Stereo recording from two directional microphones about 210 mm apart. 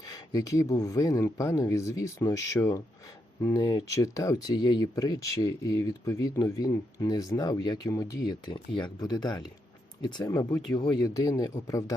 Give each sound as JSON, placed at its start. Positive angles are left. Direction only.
{"t": 0.0, "sound": "speech", "side_deg": 15}